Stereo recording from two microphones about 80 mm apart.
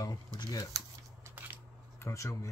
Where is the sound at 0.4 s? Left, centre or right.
Left.